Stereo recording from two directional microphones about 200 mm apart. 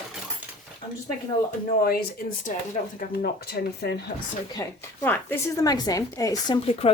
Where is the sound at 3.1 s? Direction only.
50° left (ahead or behind).